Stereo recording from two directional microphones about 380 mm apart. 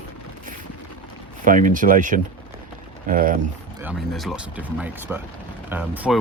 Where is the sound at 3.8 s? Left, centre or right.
Centre.